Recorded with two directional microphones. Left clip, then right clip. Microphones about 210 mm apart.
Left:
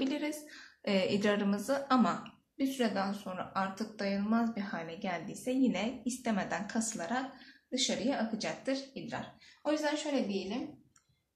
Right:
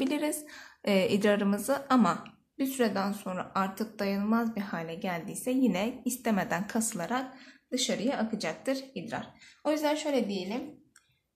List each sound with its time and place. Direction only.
0.0 s a woman's voice: 40° right (ahead or behind)